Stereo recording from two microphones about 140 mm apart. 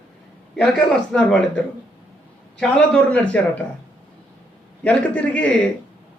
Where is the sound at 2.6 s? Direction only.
10° left (ahead or behind).